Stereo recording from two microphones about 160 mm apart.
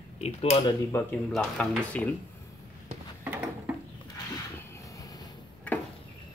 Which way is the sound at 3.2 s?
10° right (ahead or behind).